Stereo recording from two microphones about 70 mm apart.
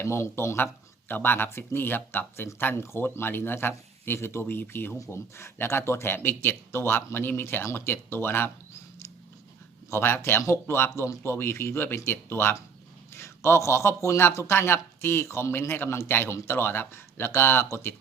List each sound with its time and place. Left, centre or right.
0.0 s speech: left
9.9 s speech: left